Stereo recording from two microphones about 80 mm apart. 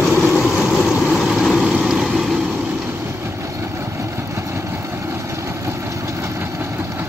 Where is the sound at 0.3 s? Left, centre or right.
Centre.